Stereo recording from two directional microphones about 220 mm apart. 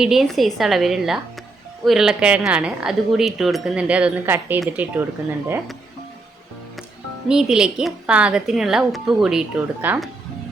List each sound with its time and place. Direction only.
0.0 s speech: centre (ahead or behind)
7.3 s speech: 5° right (ahead or behind)